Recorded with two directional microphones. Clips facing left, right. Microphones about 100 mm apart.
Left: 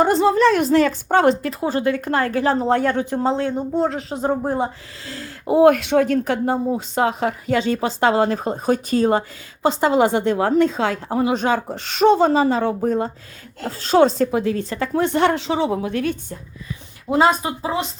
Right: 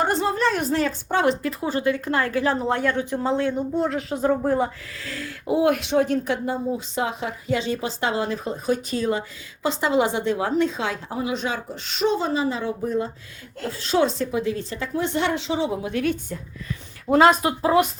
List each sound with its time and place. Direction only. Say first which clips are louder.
0.1 s a woman's voice: left 7 dB; 90° left
1.0 s a woman's voice: left 5 dB; 45° left (ahead or behind)
1.5 s a woman's voice: left 3 dB; 35° left (ahead or behind)
1.8 s a woman's voice: left 2 dB; 45° left (ahead or behind)
17.1 s speech: right 1 dB; 5° left (ahead or behind)